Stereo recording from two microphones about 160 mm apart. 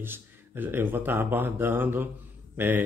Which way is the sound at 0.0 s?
15° right (ahead or behind).